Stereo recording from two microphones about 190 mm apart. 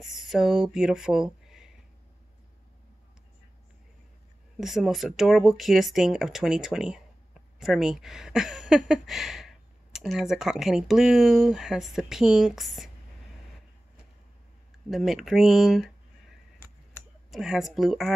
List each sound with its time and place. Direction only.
0.0 s speech: centre (ahead or behind)
4.6 s speech: centre (ahead or behind)
14.9 s speech: centre (ahead or behind)